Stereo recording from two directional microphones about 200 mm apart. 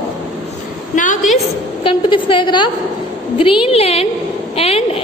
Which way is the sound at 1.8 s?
25° left (ahead or behind).